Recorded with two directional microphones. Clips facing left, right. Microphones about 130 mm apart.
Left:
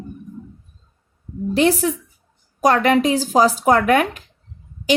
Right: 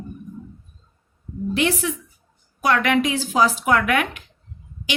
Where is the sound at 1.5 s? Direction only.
35° left (ahead or behind).